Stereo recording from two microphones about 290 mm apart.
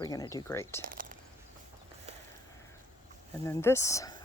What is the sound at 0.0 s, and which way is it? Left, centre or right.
Speech, centre.